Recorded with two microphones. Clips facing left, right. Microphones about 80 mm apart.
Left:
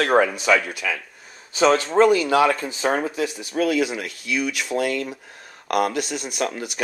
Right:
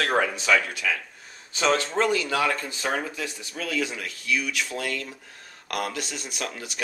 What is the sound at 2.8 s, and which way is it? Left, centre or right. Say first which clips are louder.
Speech: left 6 dB; left.